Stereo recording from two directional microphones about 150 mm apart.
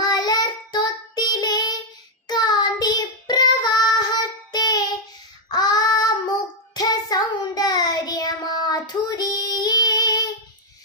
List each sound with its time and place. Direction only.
0.0 s child singing: 25° left (ahead or behind)